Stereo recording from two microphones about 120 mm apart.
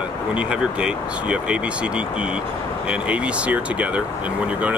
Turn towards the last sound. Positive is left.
turn(degrees=-10)  # may be behind; listen again after turning